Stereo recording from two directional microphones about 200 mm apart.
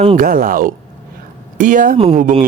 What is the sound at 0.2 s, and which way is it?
Speech, 45° right (ahead or behind).